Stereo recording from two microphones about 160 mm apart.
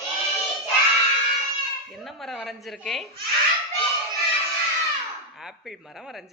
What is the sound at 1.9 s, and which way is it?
Speech, centre (ahead or behind).